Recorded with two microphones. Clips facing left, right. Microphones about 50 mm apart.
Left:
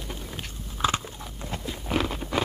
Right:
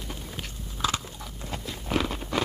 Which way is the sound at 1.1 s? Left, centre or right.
Centre.